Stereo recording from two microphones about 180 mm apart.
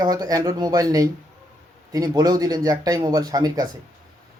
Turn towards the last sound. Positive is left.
turn(degrees=-20)  # may be behind; listen again after turning